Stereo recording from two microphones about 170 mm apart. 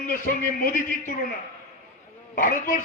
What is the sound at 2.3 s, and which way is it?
Speech, 55° left (ahead or behind).